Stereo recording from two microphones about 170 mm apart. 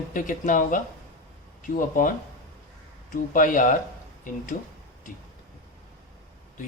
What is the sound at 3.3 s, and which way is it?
Speech, 50° left (ahead or behind).